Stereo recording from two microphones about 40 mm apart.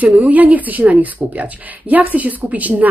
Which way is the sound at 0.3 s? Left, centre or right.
Right.